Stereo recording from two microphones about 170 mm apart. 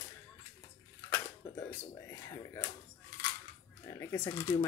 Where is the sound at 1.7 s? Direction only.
15° left (ahead or behind).